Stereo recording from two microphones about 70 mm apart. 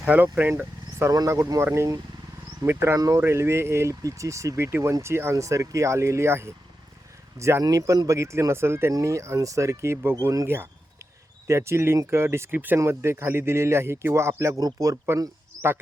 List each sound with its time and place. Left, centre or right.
0.1 s speech: right
1.3 s speech: right
7.6 s speech: right
8.0 s speech: right
8.9 s speech: right
10.2 s speech: right
10.4 s speech: right
12.5 s speech: right
12.8 s speech: right
14.6 s speech: right